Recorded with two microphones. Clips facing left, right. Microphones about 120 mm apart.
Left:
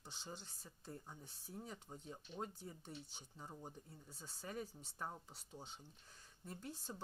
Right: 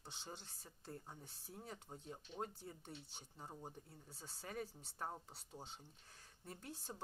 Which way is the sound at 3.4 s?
25° right (ahead or behind).